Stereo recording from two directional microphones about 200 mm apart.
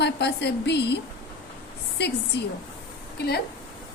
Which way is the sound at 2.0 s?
55° left (ahead or behind).